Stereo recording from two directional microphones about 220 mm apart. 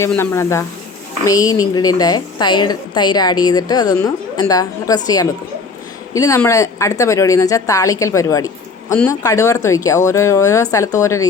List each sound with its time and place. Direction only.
0.0 s a woman's voice: 10° left (ahead or behind)